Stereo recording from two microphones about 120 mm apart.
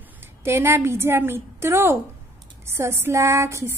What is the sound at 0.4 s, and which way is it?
A woman's voice, 20° right (ahead or behind).